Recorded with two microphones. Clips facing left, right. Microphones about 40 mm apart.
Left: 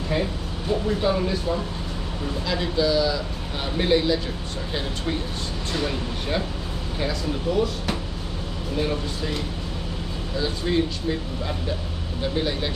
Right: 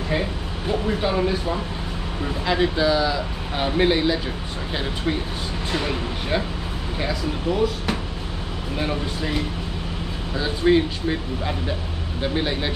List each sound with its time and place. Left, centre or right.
0.1 s a sound: centre
2.4 s speech: right
5.7 s speech: right